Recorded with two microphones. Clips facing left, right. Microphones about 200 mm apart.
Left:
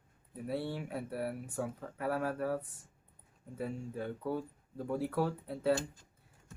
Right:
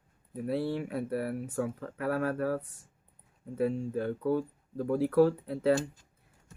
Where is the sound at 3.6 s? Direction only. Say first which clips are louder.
Right 9 dB; 75° right (ahead or behind).